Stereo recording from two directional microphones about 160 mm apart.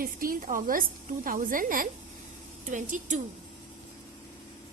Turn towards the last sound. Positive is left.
turn(degrees=-50)  # may be behind; listen again after turning